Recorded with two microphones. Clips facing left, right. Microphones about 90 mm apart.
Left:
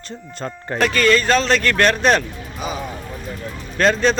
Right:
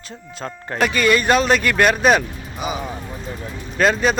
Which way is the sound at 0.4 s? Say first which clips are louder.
Left 1 dB; 5° right (ahead or behind).